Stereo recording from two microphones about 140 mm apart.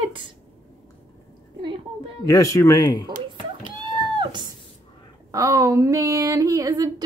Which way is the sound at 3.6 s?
35° right (ahead or behind).